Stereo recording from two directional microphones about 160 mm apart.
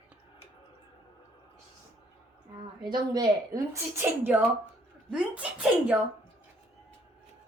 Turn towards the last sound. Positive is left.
turn(degrees=-10)  # may be behind; listen again after turning